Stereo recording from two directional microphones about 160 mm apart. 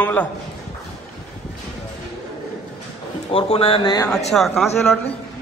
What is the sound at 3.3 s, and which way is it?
Speech, 35° left (ahead or behind).